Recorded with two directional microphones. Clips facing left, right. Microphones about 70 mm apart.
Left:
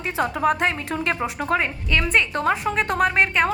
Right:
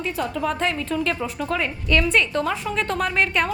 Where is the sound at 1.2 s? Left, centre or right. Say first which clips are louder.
Left 2 dB; left.